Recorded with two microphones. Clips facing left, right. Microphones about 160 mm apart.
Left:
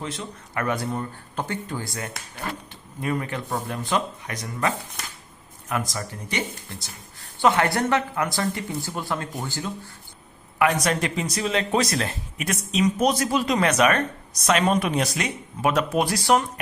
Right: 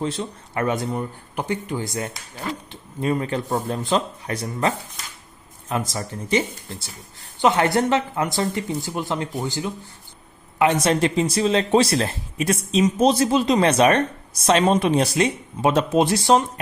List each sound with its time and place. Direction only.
0.0 s speech: 30° right (ahead or behind)
2.1 s speech: 60° left (ahead or behind)
3.0 s speech: 25° right (ahead or behind)